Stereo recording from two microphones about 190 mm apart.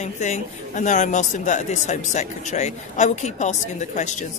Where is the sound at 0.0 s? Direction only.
40° left (ahead or behind).